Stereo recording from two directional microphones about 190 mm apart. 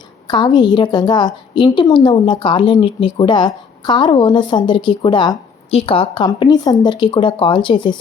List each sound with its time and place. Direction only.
0.3 s a woman's voice: 25° left (ahead or behind)